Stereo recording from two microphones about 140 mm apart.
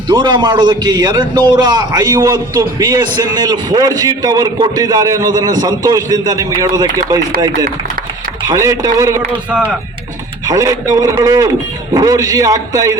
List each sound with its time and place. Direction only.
0.1 s a man's voice: 30° right (ahead or behind)
8.4 s a man's voice: 20° right (ahead or behind)
9.5 s speech: 10° right (ahead or behind)
10.5 s a man's voice: 25° right (ahead or behind)